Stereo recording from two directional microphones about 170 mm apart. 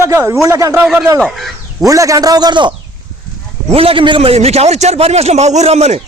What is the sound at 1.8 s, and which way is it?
A man's voice, 20° right (ahead or behind).